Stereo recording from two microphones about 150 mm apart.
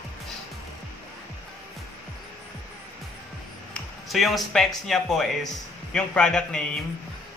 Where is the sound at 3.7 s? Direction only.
Centre (ahead or behind).